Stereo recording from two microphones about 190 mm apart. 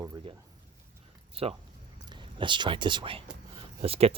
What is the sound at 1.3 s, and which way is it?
Speech, 30° right (ahead or behind).